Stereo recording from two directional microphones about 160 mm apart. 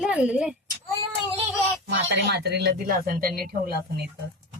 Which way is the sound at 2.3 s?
90° right.